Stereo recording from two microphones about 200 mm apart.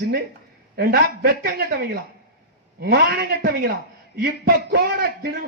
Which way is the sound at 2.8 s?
50° right (ahead or behind).